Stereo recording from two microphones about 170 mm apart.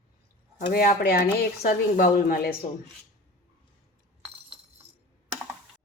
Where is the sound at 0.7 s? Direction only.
60° left (ahead or behind).